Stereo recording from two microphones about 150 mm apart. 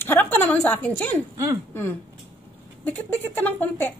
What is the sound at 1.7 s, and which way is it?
Speech, 15° left (ahead or behind).